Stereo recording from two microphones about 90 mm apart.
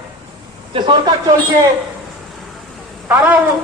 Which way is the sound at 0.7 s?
60° right (ahead or behind).